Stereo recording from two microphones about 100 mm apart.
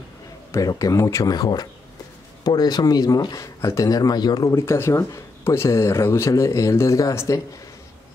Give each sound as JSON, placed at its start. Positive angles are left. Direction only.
{"t": 0.5, "sound": "speech", "side_deg": 35}